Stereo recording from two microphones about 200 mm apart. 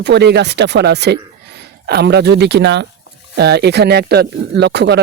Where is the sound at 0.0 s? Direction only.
55° right (ahead or behind).